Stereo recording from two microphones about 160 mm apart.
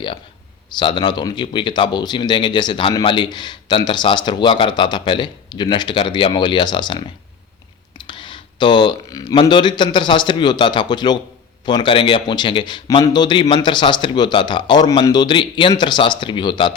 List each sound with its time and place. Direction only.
0.8 s speech: 30° left (ahead or behind)